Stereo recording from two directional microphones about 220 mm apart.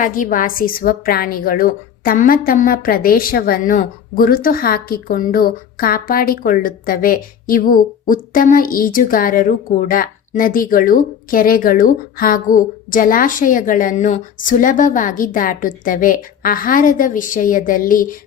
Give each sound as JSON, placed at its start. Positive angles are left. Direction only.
{"t": 0.0, "sound": "a woman's voice", "side_deg": 40}